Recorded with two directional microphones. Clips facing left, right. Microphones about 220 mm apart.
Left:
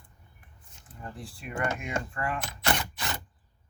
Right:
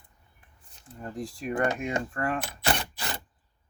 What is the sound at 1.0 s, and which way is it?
Speech, 40° right (ahead or behind).